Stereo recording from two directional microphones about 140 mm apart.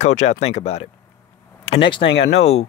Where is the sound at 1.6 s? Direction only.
40° left (ahead or behind).